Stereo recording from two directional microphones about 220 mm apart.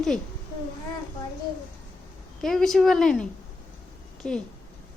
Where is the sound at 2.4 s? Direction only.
Centre (ahead or behind).